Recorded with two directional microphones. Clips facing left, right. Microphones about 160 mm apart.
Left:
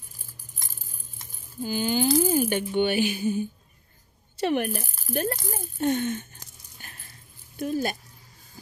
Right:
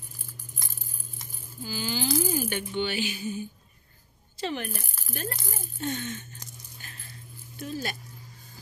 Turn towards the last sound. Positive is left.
turn(degrees=50)  # may be behind; listen again after turning